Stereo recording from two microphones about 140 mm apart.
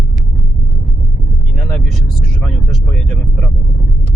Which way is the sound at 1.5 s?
5° left (ahead or behind).